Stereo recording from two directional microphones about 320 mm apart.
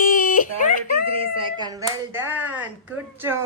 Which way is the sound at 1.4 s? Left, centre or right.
Centre.